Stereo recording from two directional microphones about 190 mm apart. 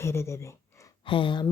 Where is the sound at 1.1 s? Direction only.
25° left (ahead or behind).